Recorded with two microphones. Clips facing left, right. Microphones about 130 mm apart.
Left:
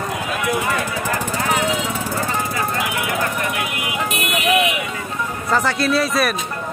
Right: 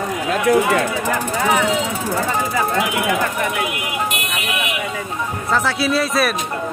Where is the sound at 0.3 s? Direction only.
70° right (ahead or behind).